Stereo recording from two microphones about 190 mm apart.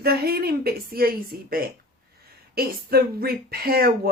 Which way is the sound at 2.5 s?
55° right (ahead or behind).